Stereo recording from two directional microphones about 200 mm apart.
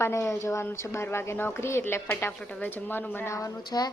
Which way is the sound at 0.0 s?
15° left (ahead or behind).